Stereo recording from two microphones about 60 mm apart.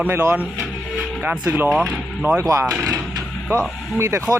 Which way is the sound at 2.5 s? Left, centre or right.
Right.